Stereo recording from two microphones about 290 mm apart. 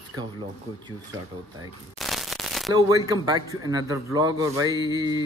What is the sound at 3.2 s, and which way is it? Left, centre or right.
A man's voice, centre.